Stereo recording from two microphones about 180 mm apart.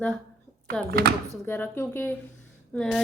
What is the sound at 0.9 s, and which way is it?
Speech, 60° right (ahead or behind).